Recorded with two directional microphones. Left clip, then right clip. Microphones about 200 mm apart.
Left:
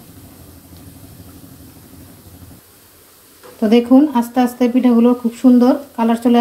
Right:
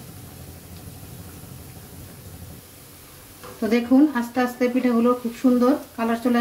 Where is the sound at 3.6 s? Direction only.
35° left (ahead or behind).